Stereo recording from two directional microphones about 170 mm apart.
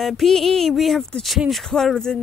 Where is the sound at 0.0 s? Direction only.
Centre (ahead or behind).